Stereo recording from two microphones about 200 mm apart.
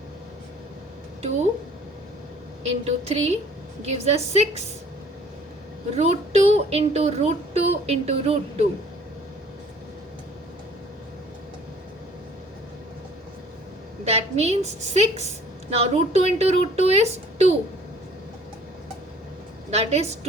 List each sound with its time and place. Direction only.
2.6 s speech: 30° right (ahead or behind)
6.0 s speech: 30° right (ahead or behind)
14.0 s a woman's voice: 35° right (ahead or behind)
19.7 s speech: 30° right (ahead or behind)